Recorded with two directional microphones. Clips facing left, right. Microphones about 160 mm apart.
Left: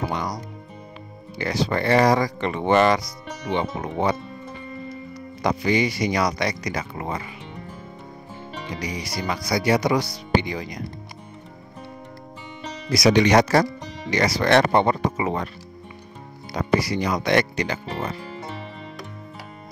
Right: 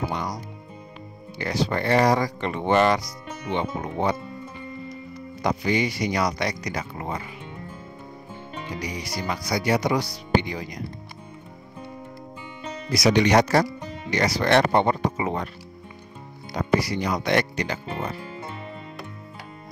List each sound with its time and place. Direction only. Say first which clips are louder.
0.1 s music: left 2 dB; 90° left
1.4 s speech: left 2 dB; 90° left
5.4 s speech: left 2 dB; 90° left
8.8 s speech: left 2 dB; 90° left
12.9 s speech: left 2 dB; 90° left
16.5 s speech: left 1 dB; 90° left